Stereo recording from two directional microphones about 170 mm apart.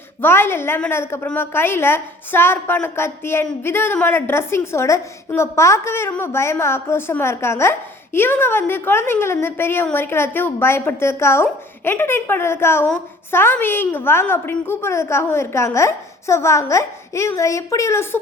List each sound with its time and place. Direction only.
0.2 s a woman's voice: 15° left (ahead or behind)